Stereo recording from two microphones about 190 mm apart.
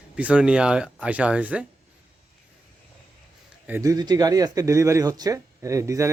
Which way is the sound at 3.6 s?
15° right (ahead or behind).